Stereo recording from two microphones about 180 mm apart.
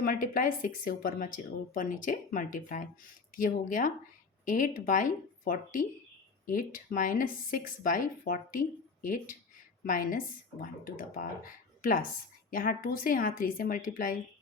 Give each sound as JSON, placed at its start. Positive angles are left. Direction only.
{"t": 0.0, "sound": "speech", "side_deg": 50}